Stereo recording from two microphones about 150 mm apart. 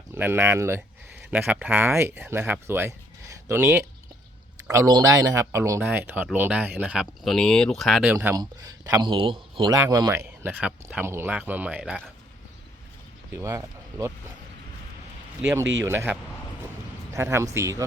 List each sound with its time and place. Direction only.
0.1 s speech: 15° right (ahead or behind)
8.0 s speech: 15° right (ahead or behind)
8.4 s speech: 25° right (ahead or behind)
9.7 s speech: 25° right (ahead or behind)
10.2 s speech: 10° right (ahead or behind)
13.3 s speech: 20° right (ahead or behind)
15.4 s speech: 20° right (ahead or behind)